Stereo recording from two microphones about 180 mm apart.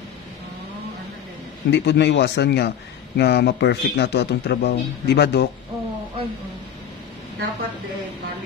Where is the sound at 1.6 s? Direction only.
70° left (ahead or behind).